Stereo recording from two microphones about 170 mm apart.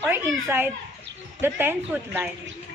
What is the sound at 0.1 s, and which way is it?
A child's voice, 15° right (ahead or behind).